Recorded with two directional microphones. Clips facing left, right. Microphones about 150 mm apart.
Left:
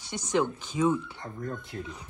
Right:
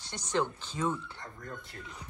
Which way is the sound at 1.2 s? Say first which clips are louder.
Left 7 dB; 20° left (ahead or behind).